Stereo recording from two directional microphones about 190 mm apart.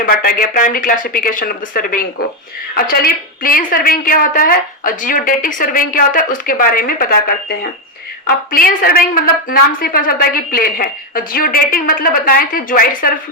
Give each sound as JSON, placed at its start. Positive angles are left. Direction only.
{"t": 0.0, "sound": "a woman's voice", "side_deg": 50}